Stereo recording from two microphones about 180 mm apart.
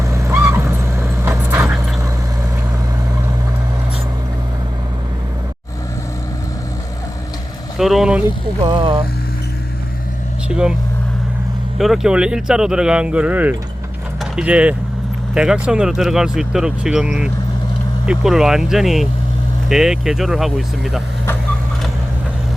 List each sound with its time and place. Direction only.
0.0 s vehicle: 15° right (ahead or behind)
7.8 s speech: centre (ahead or behind)
8.7 s speech: 30° right (ahead or behind)
10.5 s speech: 5° right (ahead or behind)
11.8 s speech: centre (ahead or behind)